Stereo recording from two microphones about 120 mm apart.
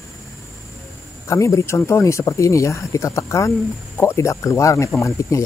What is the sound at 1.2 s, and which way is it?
Speech, 25° left (ahead or behind).